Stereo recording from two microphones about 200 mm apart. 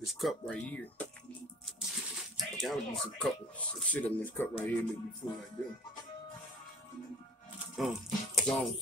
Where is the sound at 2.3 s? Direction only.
Centre (ahead or behind).